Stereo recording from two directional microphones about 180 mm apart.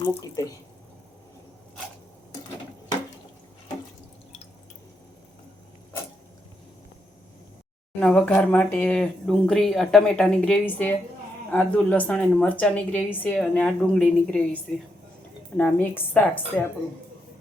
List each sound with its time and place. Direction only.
0.0 s speech: 20° left (ahead or behind)
7.9 s speech: 5° left (ahead or behind)